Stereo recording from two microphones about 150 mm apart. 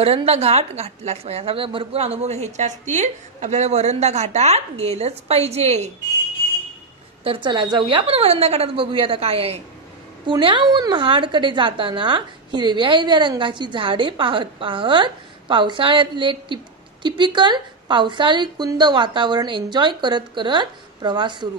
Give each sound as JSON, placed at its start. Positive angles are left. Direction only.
{"t": 0.0, "sound": "a woman's voice", "side_deg": -40}
{"t": 7.2, "sound": "a woman's voice", "side_deg": -35}